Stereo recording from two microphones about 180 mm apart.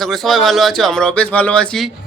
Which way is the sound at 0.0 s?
Centre (ahead or behind).